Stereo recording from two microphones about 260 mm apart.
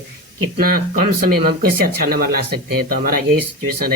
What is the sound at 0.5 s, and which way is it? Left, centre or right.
Speech, right.